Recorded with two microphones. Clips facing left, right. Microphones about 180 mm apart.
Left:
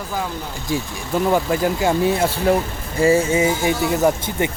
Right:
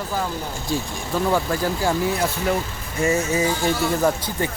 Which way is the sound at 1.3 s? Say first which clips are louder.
Left 3 dB; 20° left (ahead or behind).